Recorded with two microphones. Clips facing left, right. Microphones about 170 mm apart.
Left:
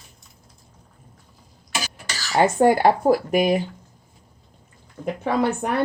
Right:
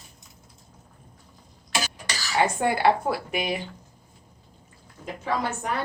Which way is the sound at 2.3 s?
45° left (ahead or behind).